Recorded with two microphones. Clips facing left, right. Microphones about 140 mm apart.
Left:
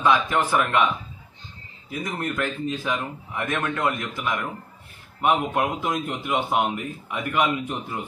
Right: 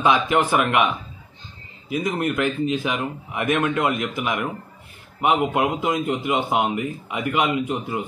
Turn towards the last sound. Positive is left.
turn(degrees=-15)  # may be behind; listen again after turning